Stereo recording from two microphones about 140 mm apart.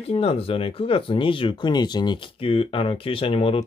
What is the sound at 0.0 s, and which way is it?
Speech, 45° left (ahead or behind).